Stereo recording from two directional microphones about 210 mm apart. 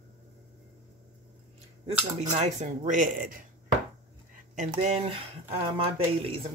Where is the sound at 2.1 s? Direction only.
30° right (ahead or behind).